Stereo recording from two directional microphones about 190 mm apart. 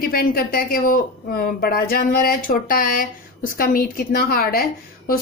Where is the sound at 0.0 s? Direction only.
50° left (ahead or behind).